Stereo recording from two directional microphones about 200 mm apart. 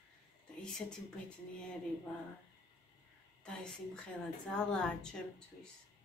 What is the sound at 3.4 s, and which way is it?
A woman's voice, 5° left (ahead or behind).